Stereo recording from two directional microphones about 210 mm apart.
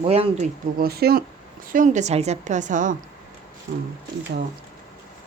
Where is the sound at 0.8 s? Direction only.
45° right (ahead or behind).